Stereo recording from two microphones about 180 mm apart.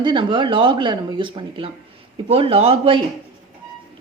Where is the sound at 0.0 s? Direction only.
25° right (ahead or behind).